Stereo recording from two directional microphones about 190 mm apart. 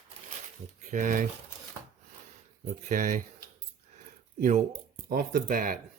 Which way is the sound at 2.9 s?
45° right (ahead or behind).